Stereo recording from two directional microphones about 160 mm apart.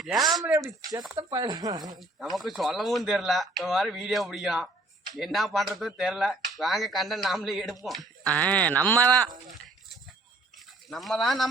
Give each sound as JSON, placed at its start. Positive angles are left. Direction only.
{"t": 0.0, "sound": "a sound", "side_deg": 0}
{"t": 0.5, "sound": "speech", "side_deg": -25}
{"t": 2.3, "sound": "speech", "side_deg": 0}
{"t": 10.8, "sound": "speech", "side_deg": 0}